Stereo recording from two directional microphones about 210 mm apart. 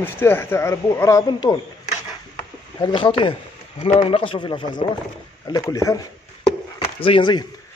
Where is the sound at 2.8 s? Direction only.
25° left (ahead or behind).